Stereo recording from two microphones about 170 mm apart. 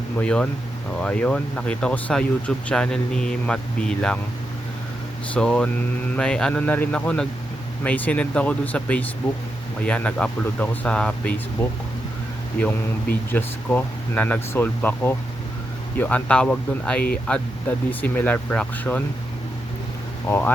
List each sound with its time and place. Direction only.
0.2 s speech: 5° left (ahead or behind)
5.3 s speech: 5° left (ahead or behind)
13.3 s speech: 10° left (ahead or behind)
20.2 s speech: 10° left (ahead or behind)